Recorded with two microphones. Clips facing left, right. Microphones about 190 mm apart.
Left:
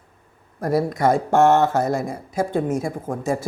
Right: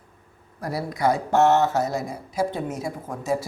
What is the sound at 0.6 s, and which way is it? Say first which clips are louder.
Speech: left 5 dB; 50° left (ahead or behind).